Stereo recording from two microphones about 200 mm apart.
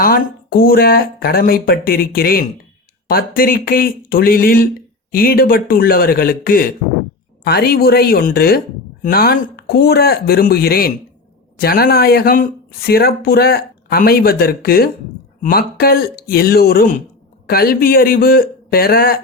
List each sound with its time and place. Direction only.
0.0 s a woman's voice: 45° left (ahead or behind)